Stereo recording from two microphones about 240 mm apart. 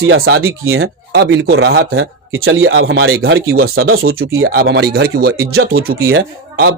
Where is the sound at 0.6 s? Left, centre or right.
Right.